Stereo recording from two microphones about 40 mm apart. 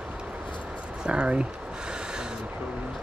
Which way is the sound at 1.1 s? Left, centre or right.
Right.